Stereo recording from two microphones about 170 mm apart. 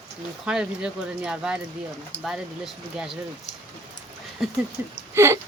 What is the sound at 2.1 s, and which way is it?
Speech, 90° left.